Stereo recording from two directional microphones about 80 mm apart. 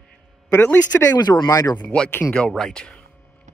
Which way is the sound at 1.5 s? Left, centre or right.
Left.